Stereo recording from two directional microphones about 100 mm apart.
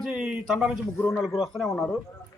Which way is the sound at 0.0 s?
10° right (ahead or behind).